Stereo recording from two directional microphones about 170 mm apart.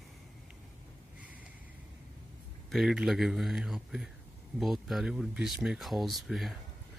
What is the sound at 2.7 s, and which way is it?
Speech, centre (ahead or behind).